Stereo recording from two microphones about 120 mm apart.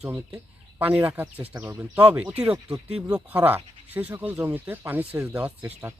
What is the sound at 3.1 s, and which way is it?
Speech, 15° right (ahead or behind).